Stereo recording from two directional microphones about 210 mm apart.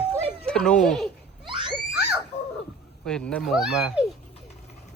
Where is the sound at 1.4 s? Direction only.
25° right (ahead or behind).